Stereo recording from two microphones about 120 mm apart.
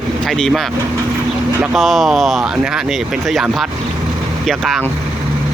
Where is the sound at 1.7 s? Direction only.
Centre (ahead or behind).